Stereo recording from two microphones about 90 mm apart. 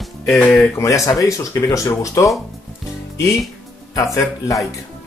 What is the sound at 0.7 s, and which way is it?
Speech, 35° left (ahead or behind).